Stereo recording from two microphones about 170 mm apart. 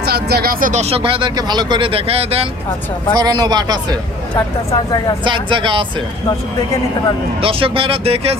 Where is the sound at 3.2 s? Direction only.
25° right (ahead or behind).